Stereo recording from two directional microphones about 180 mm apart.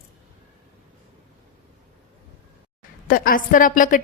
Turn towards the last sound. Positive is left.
turn(degrees=50)  # may be behind; listen again after turning